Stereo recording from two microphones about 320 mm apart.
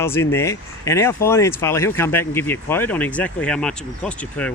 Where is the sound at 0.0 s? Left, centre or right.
Centre.